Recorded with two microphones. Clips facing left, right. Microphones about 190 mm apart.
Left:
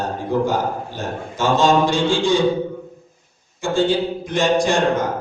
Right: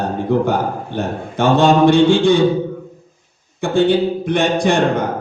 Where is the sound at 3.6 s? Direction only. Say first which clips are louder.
Right 4 dB; 60° right (ahead or behind).